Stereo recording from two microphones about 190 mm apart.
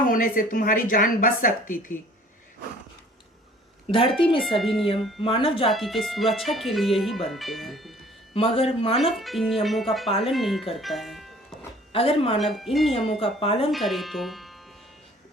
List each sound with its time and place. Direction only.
0.1 s a woman's voice: 45° left (ahead or behind)
3.9 s speech: 30° left (ahead or behind)
4.4 s speech: centre (ahead or behind)
5.2 s speech: 30° left (ahead or behind)
5.6 s speech: centre (ahead or behind)
8.4 s speech: 30° left (ahead or behind)
9.0 s speech: centre (ahead or behind)
10.1 s speech: 30° left (ahead or behind)
10.3 s speech: centre (ahead or behind)
11.9 s speech: 30° left (ahead or behind)
12.4 s speech: centre (ahead or behind)
13.1 s speech: 30° left (ahead or behind)
13.7 s speech: centre (ahead or behind)